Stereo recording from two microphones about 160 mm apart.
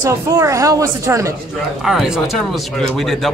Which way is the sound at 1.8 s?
5° right (ahead or behind).